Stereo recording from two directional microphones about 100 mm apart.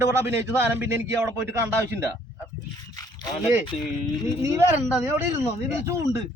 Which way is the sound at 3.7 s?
90° left.